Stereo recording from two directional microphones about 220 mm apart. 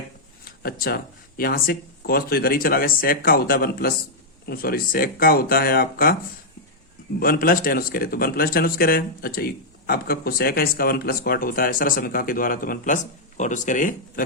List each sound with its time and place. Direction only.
0.4 s speech: 40° left (ahead or behind)
7.2 s speech: 40° left (ahead or behind)